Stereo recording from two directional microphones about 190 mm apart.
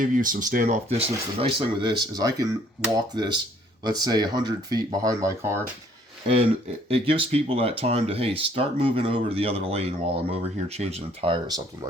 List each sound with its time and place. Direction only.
0.0 s speech: 45° right (ahead or behind); by 5.6 s 15° right (ahead or behind)
6.8 s speech: 30° right (ahead or behind)